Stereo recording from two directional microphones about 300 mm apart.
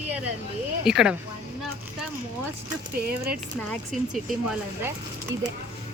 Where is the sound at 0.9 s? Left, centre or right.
Centre.